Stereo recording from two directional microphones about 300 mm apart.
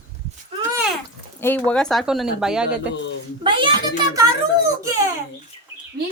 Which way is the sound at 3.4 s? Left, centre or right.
Centre.